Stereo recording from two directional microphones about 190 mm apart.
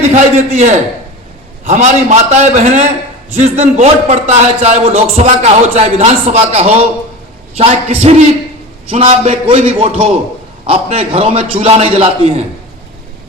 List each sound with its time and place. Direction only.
0.1 s a man's voice: 40° right (ahead or behind)